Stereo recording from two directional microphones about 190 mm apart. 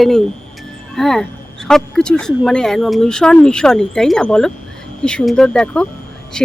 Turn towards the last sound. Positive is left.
turn(degrees=5)  # may be behind; listen again after turning